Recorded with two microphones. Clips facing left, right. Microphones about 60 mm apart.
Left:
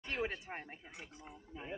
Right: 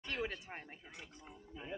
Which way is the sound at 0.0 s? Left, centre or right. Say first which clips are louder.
Left 2 dB; left.